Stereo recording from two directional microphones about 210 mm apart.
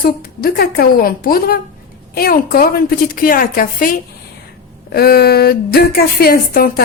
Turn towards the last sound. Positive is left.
turn(degrees=45)  # may be behind; listen again after turning